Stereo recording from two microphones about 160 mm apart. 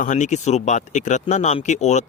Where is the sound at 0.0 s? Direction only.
50° left (ahead or behind).